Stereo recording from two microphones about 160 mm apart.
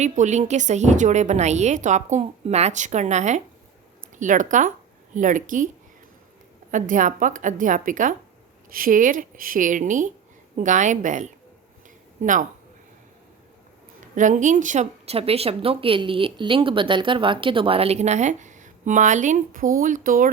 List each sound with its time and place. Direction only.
0.0 s a woman's voice: 50° right (ahead or behind)
6.7 s a woman's voice: 55° right (ahead or behind)
14.2 s a woman's voice: 50° right (ahead or behind)